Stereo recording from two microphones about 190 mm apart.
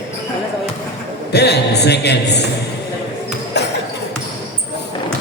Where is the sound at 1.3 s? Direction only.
60° left (ahead or behind).